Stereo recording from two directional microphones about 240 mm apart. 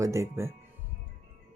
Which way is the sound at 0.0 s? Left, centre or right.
Centre.